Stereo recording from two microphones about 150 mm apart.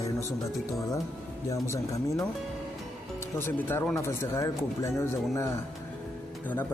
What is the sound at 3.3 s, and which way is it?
Speech, 15° left (ahead or behind).